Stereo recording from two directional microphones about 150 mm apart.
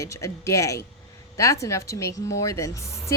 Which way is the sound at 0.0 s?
20° left (ahead or behind).